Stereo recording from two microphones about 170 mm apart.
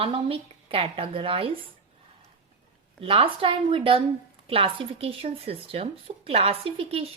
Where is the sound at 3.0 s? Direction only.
30° right (ahead or behind).